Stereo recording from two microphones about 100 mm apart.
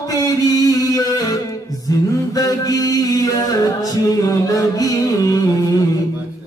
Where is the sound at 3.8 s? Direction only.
35° left (ahead or behind).